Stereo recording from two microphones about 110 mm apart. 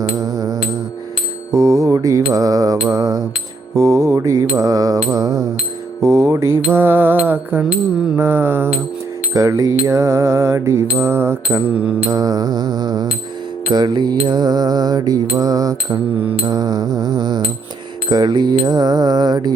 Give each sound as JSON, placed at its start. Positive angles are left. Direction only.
{"t": 0.2, "sound": "music", "side_deg": -35}
{"t": 1.5, "sound": "mantra", "side_deg": -30}
{"t": 9.3, "sound": "mantra", "side_deg": -30}
{"t": 12.1, "sound": "mantra", "side_deg": -35}